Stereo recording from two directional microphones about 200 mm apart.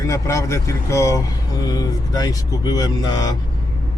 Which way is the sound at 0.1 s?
15° left (ahead or behind).